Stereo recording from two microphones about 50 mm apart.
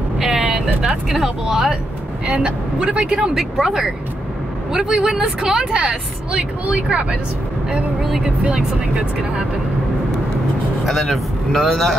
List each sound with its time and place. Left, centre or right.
0.2 s speech: centre
3.3 s speech: centre; by 7.2 s right
8.0 s speech: centre
8.5 s speech: centre
10.9 s speech: centre